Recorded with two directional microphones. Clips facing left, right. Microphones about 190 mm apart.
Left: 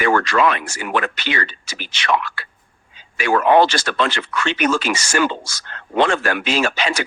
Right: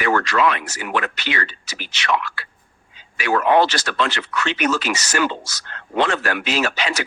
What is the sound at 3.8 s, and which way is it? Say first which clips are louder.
Speech: left 2 dB; 50° left (ahead or behind).